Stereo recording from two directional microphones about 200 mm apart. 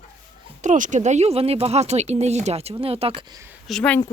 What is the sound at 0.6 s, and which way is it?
Speech, 40° right (ahead or behind).